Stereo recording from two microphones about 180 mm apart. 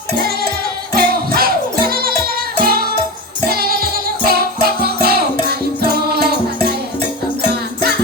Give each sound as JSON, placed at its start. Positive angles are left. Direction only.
{"t": 0.9, "sound": "music", "side_deg": -55}